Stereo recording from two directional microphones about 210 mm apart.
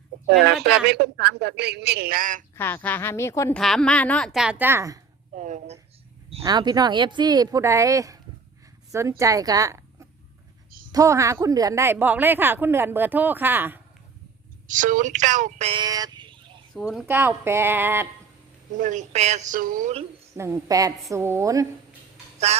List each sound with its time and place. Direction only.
0.3 s a man's voice: 50° right (ahead or behind)
2.6 s a woman's voice: 10° left (ahead or behind)
3.6 s a woman's voice: centre (ahead or behind)
5.3 s speech: 35° right (ahead or behind)
6.4 s a woman's voice: 20° right (ahead or behind)
14.7 s speech: 40° right (ahead or behind); by 16.4 s 20° right (ahead or behind)
16.9 s speech: 5° right (ahead or behind)
18.8 s speech: 35° right (ahead or behind)
20.3 s speech: 15° right (ahead or behind)
22.5 s music: 30° right (ahead or behind)